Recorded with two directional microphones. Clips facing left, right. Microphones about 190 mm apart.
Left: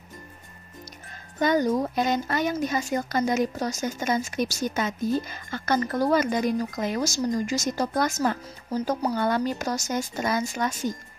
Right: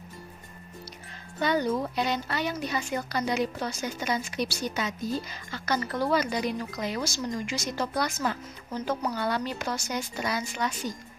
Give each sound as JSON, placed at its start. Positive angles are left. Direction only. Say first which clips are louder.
{"t": 1.4, "sound": "speech", "louder": "left 4 dB", "side_deg": 45}
{"t": 9.2, "sound": "speech", "louder": "left 5 dB", "side_deg": 45}